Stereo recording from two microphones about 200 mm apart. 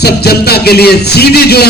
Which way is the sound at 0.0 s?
55° left (ahead or behind).